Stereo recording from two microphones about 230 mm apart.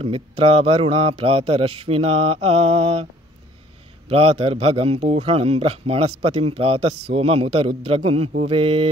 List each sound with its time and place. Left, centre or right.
0.0 s speech: right
4.1 s speech: right